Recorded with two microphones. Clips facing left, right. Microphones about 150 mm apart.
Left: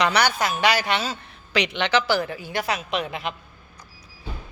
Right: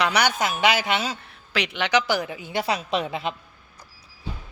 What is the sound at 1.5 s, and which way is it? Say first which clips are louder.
A woman's voice: left 1 dB; 5° right (ahead or behind).